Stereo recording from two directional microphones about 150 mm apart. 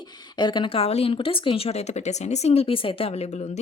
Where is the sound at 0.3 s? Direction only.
30° left (ahead or behind).